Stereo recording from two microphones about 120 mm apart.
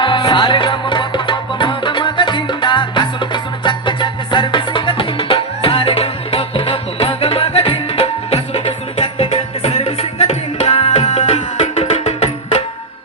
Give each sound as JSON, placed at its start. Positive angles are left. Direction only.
{"t": 0.0, "sound": "music", "side_deg": 45}